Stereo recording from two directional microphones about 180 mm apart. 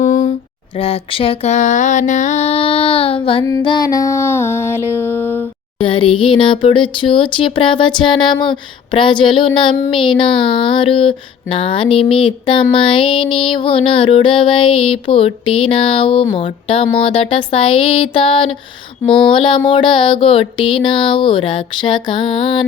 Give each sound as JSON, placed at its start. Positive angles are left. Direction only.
{"t": 0.0, "sound": "a sound", "side_deg": 40}
{"t": 0.8, "sound": "mantra", "side_deg": 30}
{"t": 3.4, "sound": "music", "side_deg": 20}
{"t": 5.8, "sound": "speech", "side_deg": 30}